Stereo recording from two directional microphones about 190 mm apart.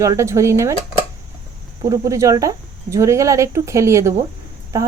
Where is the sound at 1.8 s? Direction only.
20° right (ahead or behind).